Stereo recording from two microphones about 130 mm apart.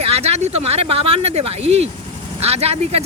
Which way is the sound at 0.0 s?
50° right (ahead or behind).